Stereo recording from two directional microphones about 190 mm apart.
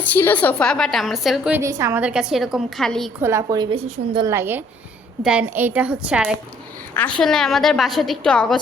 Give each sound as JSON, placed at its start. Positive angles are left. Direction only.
{"t": 0.0, "sound": "a woman's voice", "side_deg": 10}
{"t": 1.5, "sound": "a woman's voice", "side_deg": -15}
{"t": 3.2, "sound": "a woman's voice", "side_deg": -15}
{"t": 4.3, "sound": "a woman's voice", "side_deg": -10}
{"t": 6.9, "sound": "a woman's voice", "side_deg": 5}